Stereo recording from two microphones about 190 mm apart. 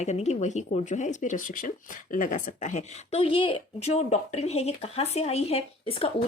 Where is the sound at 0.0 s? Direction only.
35° left (ahead or behind).